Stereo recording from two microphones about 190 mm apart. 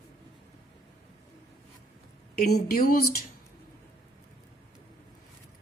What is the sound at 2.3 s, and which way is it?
Speech, 50° left (ahead or behind).